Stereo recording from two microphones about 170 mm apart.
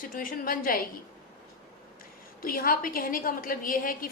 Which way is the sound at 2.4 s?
55° left (ahead or behind).